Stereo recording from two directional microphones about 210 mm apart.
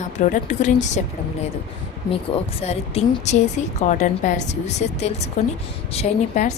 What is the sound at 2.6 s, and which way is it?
A woman's voice, 30° left (ahead or behind).